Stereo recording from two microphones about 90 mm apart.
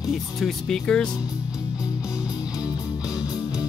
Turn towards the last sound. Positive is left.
turn(degrees=-10)  # may be behind; listen again after turning